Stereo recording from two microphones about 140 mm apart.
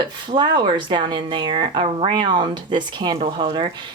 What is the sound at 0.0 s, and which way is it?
Speech, 30° right (ahead or behind).